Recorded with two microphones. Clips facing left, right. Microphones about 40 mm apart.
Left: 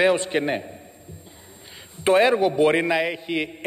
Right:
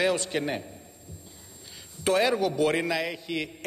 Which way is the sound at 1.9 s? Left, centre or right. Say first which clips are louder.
Left 6 dB; left.